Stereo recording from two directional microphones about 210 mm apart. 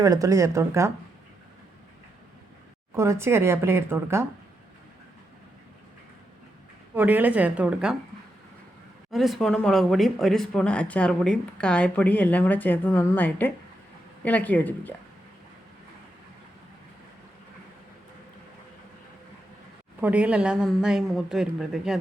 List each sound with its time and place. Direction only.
0.0 s speech: 15° right (ahead or behind)
2.9 s speech: 15° right (ahead or behind)
6.9 s speech: 10° right (ahead or behind)
9.1 s a woman's voice: centre (ahead or behind)
20.0 s speech: 5° right (ahead or behind)